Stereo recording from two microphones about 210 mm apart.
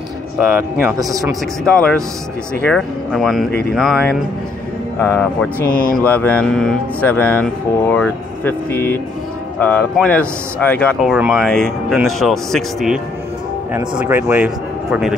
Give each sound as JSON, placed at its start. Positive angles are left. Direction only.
{"t": 0.7, "sound": "speech", "side_deg": -15}
{"t": 1.6, "sound": "speech", "side_deg": 5}
{"t": 5.7, "sound": "speech", "side_deg": 40}
{"t": 6.0, "sound": "speech", "side_deg": 10}